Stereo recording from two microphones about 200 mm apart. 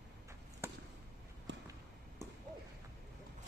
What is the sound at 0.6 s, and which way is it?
Basketball bounce, 10° right (ahead or behind).